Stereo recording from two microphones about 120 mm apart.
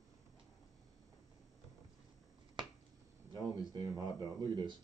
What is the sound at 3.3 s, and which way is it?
Speech, 35° right (ahead or behind).